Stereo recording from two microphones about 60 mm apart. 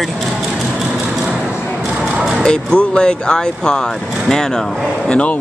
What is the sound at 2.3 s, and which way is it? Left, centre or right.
Speech, centre.